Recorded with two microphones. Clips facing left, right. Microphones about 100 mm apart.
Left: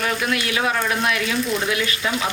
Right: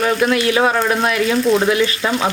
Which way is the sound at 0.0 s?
35° right (ahead or behind).